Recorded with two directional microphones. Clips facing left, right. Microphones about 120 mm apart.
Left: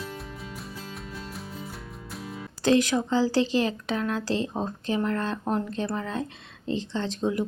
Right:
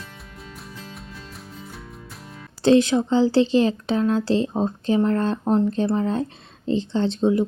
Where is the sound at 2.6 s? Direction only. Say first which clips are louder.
Right 6 dB; 30° right (ahead or behind).